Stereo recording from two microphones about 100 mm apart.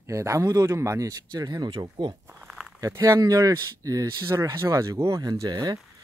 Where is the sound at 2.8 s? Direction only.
35° right (ahead or behind).